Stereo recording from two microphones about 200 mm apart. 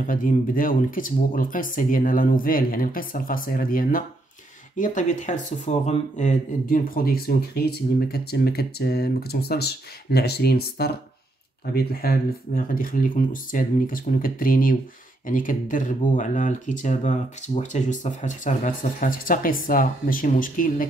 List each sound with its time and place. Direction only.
0.0 s speech: 40° left (ahead or behind)